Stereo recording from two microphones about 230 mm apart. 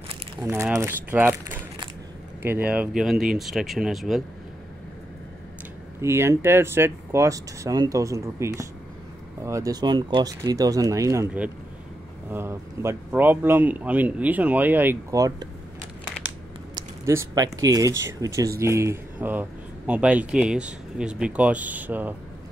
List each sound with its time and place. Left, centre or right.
0.4 s speech: centre
5.9 s speech: centre
16.7 s a sound: centre
17.6 s speech: centre